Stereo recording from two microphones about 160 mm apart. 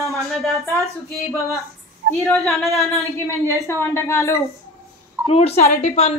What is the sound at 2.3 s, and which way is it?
Speech, centre (ahead or behind).